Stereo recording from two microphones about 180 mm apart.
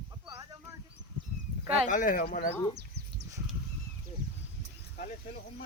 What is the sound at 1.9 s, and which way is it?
Speech, 45° left (ahead or behind).